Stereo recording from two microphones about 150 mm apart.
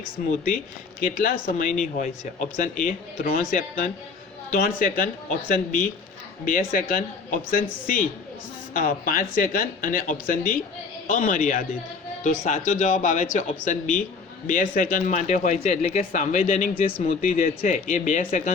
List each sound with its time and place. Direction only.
0.2 s speech: 65° left (ahead or behind)